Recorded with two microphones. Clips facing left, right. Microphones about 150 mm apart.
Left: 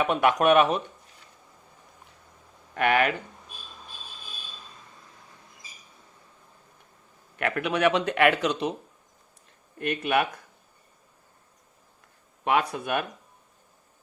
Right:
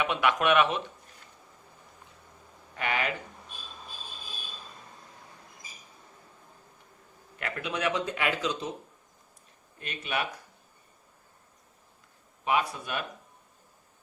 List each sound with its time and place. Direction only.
0.0 s speech: 45° left (ahead or behind)
2.7 s a man's voice: 65° left (ahead or behind)
7.3 s a man's voice: 65° left (ahead or behind)
9.8 s a man's voice: 60° left (ahead or behind)
12.5 s a man's voice: 60° left (ahead or behind)